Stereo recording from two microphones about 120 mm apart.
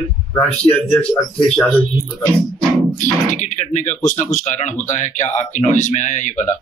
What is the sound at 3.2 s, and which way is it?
Speech, 90° left.